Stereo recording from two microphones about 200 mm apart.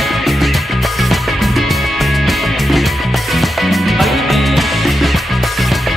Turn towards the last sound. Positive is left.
turn(degrees=0)  # may be behind; listen again after turning